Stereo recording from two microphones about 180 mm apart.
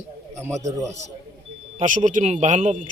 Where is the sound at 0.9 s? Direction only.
40° right (ahead or behind).